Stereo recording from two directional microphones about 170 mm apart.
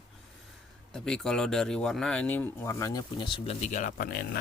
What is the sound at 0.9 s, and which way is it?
Speech, 5° left (ahead or behind).